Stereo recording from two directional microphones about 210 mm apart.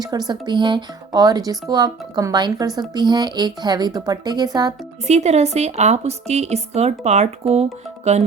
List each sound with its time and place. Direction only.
0.0 s speech: 20° right (ahead or behind)
5.0 s a woman's voice: 30° right (ahead or behind)